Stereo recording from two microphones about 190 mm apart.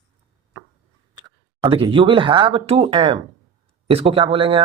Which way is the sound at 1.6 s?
30° right (ahead or behind).